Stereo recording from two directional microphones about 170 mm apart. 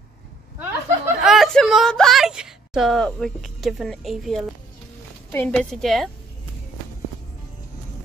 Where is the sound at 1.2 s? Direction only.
Centre (ahead or behind).